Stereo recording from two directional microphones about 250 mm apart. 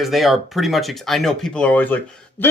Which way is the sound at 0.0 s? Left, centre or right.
Centre.